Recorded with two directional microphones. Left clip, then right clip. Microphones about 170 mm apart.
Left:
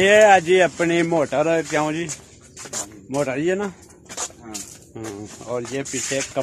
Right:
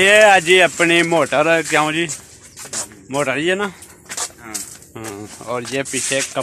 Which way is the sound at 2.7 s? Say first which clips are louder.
Right 3 dB; 10° right (ahead or behind).